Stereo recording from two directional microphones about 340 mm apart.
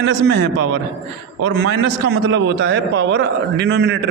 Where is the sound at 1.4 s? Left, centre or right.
Right.